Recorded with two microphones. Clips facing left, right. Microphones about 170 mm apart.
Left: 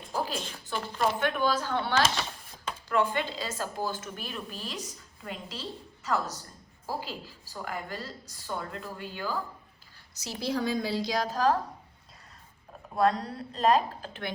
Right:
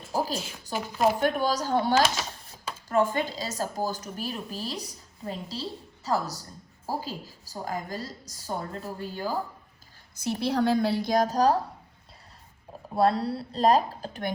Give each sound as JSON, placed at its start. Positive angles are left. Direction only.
{"t": 0.1, "sound": "a sound", "side_deg": -40}
{"t": 0.8, "sound": "speech", "side_deg": -5}
{"t": 1.2, "sound": "speech", "side_deg": -40}
{"t": 10.2, "sound": "a woman's voice", "side_deg": -60}
{"t": 13.0, "sound": "speech", "side_deg": -35}